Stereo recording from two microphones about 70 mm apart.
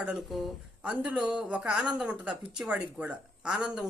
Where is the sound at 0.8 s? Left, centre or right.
Centre.